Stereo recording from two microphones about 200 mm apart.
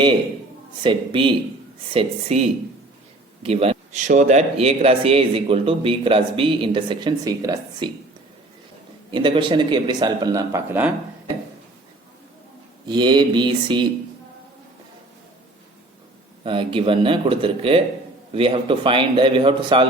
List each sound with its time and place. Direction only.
0.8 s speech: 25° right (ahead or behind)
3.4 s speech: 30° right (ahead or behind)
9.1 s speech: 25° right (ahead or behind); by 10.9 s 10° right (ahead or behind)
12.9 s speech: 20° right (ahead or behind)
16.4 s speech: 25° right (ahead or behind)